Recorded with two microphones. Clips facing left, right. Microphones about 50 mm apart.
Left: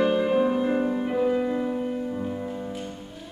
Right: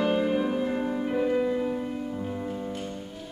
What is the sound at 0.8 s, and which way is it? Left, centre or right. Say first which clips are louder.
Music: left 3 dB; centre.